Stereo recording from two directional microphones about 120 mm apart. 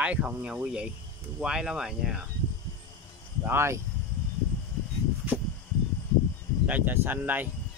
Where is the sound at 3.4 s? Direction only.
20° right (ahead or behind).